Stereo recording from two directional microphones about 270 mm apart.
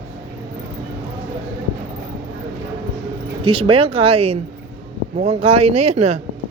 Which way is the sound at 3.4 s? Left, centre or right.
Centre.